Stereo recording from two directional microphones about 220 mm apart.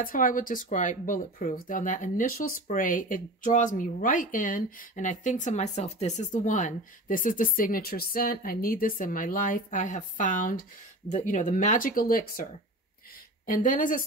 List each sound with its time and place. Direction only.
0.0 s speech: 40° left (ahead or behind)
13.5 s speech: 35° left (ahead or behind)